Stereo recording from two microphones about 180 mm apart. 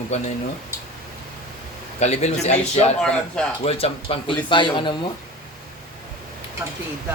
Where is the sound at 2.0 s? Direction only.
40° left (ahead or behind).